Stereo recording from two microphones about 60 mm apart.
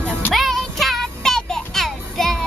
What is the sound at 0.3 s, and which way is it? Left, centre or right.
Music, centre.